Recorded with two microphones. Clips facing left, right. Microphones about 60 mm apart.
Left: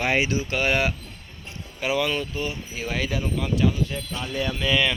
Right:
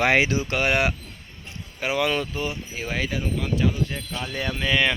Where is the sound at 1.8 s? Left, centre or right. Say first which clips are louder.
Right 1 dB; right.